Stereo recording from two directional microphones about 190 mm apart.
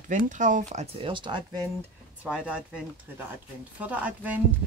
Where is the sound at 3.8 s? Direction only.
5° right (ahead or behind).